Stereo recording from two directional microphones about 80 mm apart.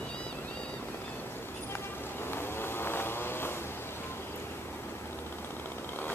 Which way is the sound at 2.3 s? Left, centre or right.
Left.